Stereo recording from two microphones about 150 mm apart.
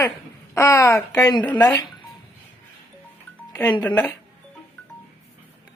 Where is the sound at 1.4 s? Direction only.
10° left (ahead or behind).